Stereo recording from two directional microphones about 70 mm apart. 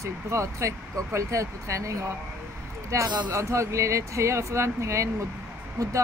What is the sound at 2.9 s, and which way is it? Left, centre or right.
Speech, right.